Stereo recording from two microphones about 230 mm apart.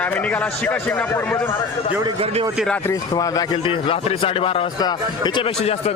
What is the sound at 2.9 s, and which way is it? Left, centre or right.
A man's voice, centre.